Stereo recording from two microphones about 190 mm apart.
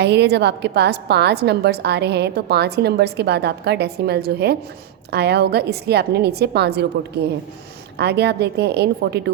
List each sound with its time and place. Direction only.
0.0 s a woman's voice: 60° right (ahead or behind)
7.9 s a woman's voice: 60° right (ahead or behind)